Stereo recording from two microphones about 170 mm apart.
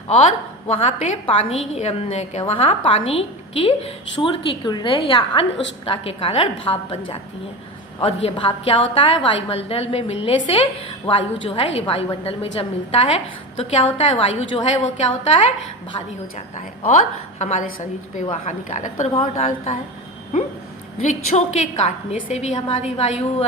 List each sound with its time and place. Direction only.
0.1 s a woman's voice: 40° left (ahead or behind)
16.6 s a woman's voice: 50° left (ahead or behind)
21.0 s a woman's voice: 40° left (ahead or behind)